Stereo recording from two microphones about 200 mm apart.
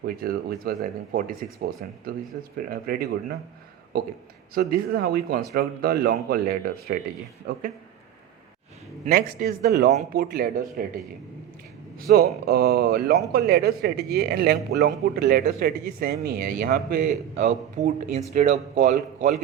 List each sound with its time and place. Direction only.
0.0 s a man's voice: 50° right (ahead or behind)
4.5 s a man's voice: 50° right (ahead or behind)
9.0 s a man's voice: 45° right (ahead or behind)
12.0 s a man's voice: 50° right (ahead or behind); by 19.3 s 35° right (ahead or behind)